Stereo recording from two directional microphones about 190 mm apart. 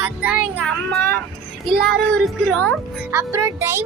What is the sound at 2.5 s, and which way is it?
Speech, 5° left (ahead or behind).